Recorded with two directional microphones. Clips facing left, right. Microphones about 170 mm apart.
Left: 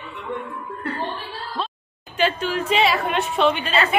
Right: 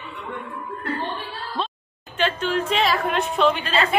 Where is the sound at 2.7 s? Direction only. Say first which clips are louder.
Left 4 dB; 5° left (ahead or behind).